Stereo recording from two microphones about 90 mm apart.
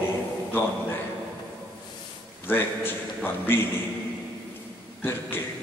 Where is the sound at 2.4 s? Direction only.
25° left (ahead or behind).